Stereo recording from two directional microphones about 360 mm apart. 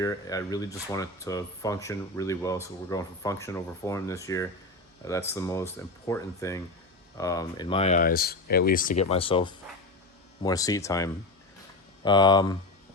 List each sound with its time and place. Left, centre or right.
0.0 s speech: centre